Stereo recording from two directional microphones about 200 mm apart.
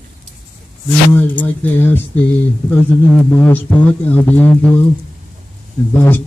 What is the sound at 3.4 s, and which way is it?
A man's voice, 10° left (ahead or behind).